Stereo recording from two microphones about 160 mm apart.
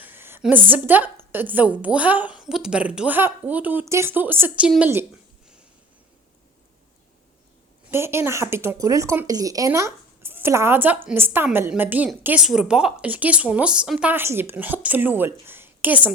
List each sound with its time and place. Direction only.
0.0 s a sound: 15° right (ahead or behind)
0.4 s a woman's voice: 10° right (ahead or behind)
7.9 s a woman's voice: 15° right (ahead or behind)